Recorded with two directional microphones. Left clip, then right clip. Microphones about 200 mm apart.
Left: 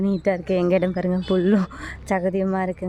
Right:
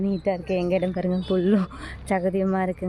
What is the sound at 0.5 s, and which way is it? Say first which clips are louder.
Speech: left 4 dB; 25° left (ahead or behind).